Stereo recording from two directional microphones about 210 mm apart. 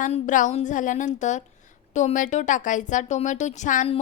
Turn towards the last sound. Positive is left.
turn(degrees=35)  # may be behind; listen again after turning